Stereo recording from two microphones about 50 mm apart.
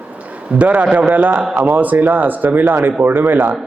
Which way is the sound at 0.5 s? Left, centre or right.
Right.